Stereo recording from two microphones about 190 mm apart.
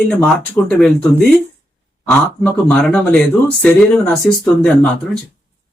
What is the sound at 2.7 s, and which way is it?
Speech, 5° left (ahead or behind).